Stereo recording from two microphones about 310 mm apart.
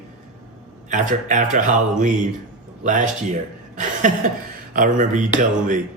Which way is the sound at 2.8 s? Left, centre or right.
Right.